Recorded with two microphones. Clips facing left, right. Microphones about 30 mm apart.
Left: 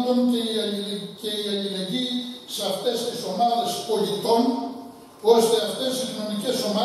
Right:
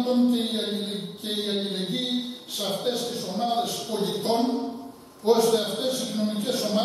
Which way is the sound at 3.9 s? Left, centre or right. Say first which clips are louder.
Left 4 dB; left.